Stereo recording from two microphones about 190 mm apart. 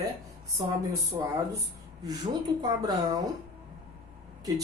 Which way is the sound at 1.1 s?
25° right (ahead or behind).